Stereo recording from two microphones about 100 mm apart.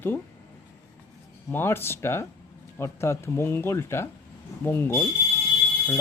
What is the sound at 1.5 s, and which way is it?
Mechanisms, 25° left (ahead or behind).